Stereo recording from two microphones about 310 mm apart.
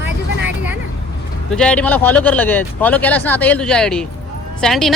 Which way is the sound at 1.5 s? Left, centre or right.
Centre.